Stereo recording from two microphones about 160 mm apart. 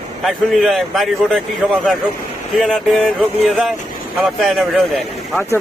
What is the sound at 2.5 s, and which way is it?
Speech, centre (ahead or behind).